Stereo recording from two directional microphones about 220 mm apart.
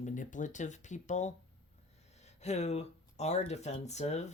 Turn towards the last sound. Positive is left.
turn(degrees=30)  # may be behind; listen again after turning